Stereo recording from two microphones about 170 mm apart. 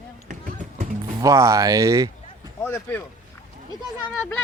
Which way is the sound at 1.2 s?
20° right (ahead or behind).